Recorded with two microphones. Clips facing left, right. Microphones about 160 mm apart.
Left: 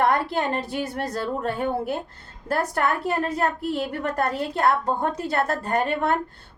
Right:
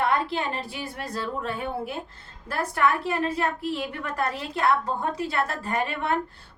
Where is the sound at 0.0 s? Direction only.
45° left (ahead or behind).